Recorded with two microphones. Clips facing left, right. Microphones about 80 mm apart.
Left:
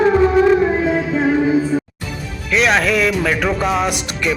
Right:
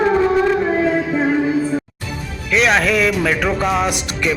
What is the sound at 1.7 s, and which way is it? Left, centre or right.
Music, centre.